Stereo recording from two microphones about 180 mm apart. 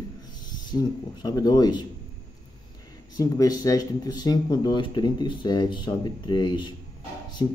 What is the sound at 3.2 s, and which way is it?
Speech, 20° left (ahead or behind).